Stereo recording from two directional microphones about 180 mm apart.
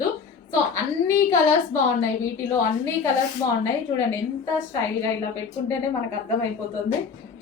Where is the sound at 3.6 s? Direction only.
15° left (ahead or behind).